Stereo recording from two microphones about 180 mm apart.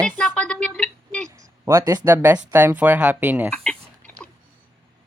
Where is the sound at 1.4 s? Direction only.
20° right (ahead or behind).